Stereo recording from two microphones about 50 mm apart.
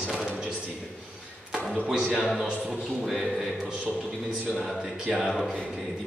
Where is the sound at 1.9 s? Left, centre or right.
Centre.